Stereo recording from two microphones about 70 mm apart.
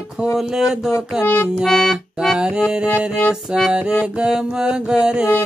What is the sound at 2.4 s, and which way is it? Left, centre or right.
Music, centre.